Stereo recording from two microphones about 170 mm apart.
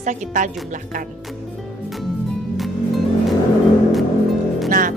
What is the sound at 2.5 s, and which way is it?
Music, centre (ahead or behind).